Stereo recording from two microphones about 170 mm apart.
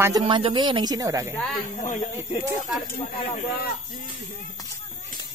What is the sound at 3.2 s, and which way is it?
Speech, 35° left (ahead or behind).